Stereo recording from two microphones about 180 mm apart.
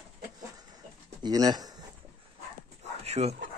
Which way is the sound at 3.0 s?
35° right (ahead or behind).